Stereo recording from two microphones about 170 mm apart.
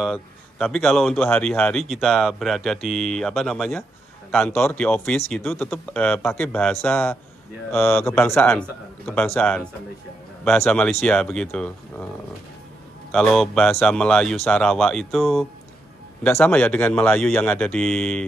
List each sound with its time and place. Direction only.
0.0 s speech: centre (ahead or behind)
8.0 s speech: 15° left (ahead or behind)
13.1 s speech: centre (ahead or behind)
16.4 s speech: 5° left (ahead or behind)